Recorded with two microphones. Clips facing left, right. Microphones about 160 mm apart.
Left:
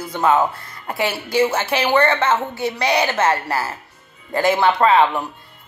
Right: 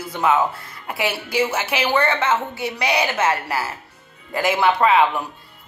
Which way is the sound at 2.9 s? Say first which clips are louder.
Left 2 dB; 35° left (ahead or behind).